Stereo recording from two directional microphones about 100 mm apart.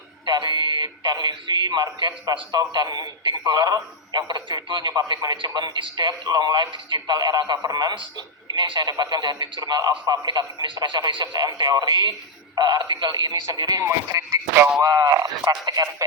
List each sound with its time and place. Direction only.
0.3 s a man's voice: 50° right (ahead or behind); by 14.7 s 25° right (ahead or behind)
14.8 s speech: 40° right (ahead or behind)